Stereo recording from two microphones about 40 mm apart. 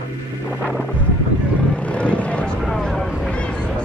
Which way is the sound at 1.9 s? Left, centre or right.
Left.